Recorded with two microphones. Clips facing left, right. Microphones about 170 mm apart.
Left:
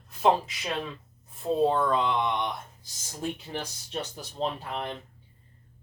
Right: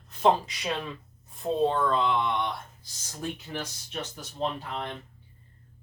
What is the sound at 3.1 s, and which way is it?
Speech, 30° left (ahead or behind).